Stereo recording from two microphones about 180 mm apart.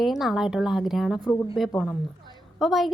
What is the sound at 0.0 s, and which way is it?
A woman's voice, centre (ahead or behind).